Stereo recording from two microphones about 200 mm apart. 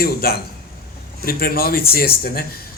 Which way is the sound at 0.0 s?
50° left (ahead or behind).